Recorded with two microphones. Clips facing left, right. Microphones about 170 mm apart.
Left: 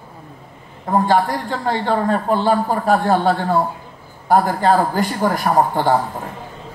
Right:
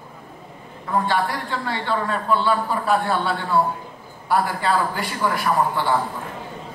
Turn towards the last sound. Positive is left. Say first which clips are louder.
# left 5 dB
turn(degrees=45)  # may be behind; listen again after turning